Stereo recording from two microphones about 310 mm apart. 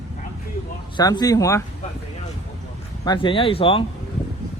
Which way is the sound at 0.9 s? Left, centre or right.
Centre.